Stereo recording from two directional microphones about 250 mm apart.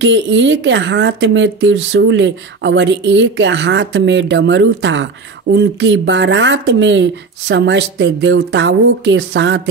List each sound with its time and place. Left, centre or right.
0.0 s a woman's voice: right